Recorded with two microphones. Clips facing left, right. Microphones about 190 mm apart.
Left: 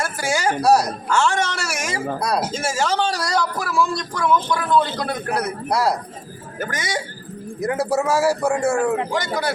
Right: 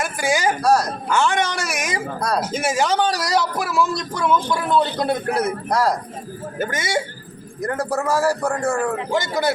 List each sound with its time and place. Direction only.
0.0 s a sound: 15° right (ahead or behind)
0.6 s a man's voice: 10° left (ahead or behind)
1.1 s speech: 15° right (ahead or behind)
2.2 s a man's voice: 10° left (ahead or behind)
2.5 s speech: 15° right (ahead or behind)
5.6 s a man's voice: 10° left (ahead or behind)
6.6 s speech: 25° right (ahead or behind)
7.6 s a man's voice: 10° left (ahead or behind)
9.1 s speech: 25° right (ahead or behind)